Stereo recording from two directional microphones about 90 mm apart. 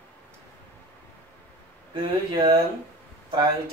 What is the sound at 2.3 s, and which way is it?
Speech, 55° right (ahead or behind).